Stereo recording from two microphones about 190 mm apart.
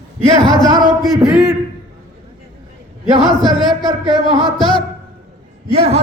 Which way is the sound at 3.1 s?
25° right (ahead or behind).